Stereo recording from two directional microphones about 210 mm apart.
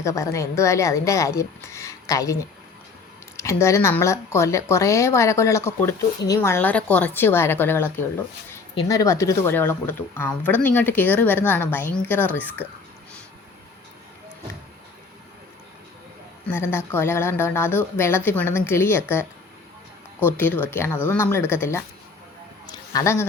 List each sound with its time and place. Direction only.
0.0 s speech: 15° left (ahead or behind)
16.5 s speech: 10° left (ahead or behind)
20.2 s speech: 10° left (ahead or behind)
22.7 s a sound: 20° left (ahead or behind)